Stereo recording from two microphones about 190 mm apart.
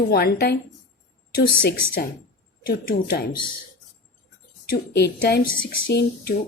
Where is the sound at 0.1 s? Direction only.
55° left (ahead or behind).